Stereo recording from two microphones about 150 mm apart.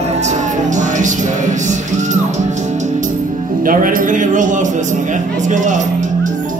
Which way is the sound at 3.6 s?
65° right (ahead or behind).